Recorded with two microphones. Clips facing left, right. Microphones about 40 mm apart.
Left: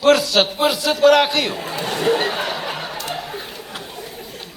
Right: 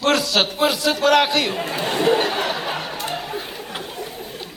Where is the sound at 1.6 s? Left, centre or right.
Right.